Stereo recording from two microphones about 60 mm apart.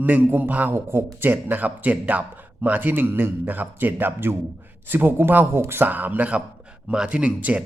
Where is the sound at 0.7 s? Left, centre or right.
Right.